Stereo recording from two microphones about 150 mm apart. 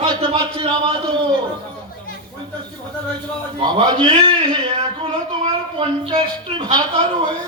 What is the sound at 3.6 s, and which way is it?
Speech, 30° right (ahead or behind).